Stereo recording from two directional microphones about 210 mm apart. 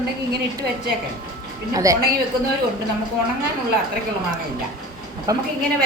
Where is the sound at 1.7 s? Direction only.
15° right (ahead or behind).